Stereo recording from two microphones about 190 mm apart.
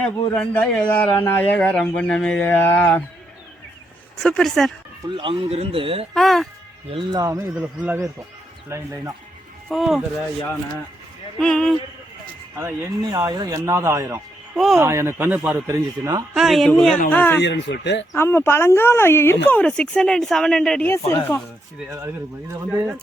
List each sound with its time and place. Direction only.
0.0 s speech: 5° left (ahead or behind)
4.2 s speech: 5° left (ahead or behind)
5.0 s a man's voice: 25° right (ahead or behind)
6.1 s speech: centre (ahead or behind)
6.9 s a man's voice: 20° right (ahead or behind)
9.6 s speech: centre (ahead or behind)
11.3 s speech: 5° left (ahead or behind)
12.5 s speech: 15° right (ahead or behind)
14.5 s speech: centre (ahead or behind)
14.8 s speech: 15° right (ahead or behind)
16.3 s speech: centre (ahead or behind)
17.4 s speech: 65° left (ahead or behind)
18.1 s speech: 15° left (ahead or behind)